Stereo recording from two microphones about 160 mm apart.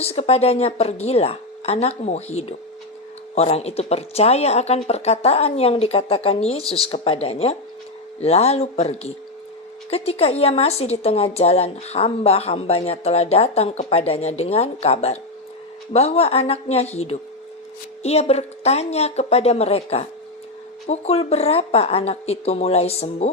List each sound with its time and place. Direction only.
0.0 s a woman's voice: 40° left (ahead or behind)